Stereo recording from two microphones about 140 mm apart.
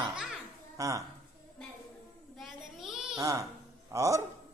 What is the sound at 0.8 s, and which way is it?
Speech, 25° right (ahead or behind).